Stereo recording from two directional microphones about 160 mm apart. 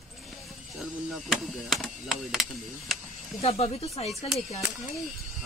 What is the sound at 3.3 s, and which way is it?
Speech, 40° left (ahead or behind).